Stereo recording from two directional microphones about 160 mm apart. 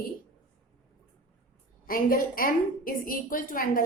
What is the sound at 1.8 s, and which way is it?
A woman's voice, 60° left (ahead or behind).